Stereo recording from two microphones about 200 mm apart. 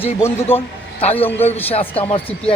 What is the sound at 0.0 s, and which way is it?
Speech, 10° left (ahead or behind).